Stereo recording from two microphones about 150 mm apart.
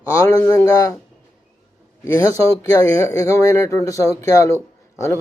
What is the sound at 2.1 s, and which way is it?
Speech, 20° left (ahead or behind).